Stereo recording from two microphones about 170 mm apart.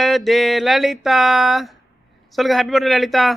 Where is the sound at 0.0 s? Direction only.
Centre (ahead or behind).